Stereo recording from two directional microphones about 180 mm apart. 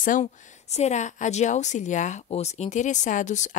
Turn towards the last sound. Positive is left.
turn(degrees=40)  # may be behind; listen again after turning